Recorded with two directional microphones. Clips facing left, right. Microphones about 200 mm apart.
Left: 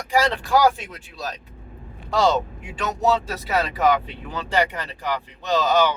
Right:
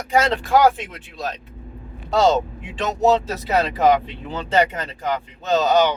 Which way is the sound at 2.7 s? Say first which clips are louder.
Right 4 dB; 20° right (ahead or behind).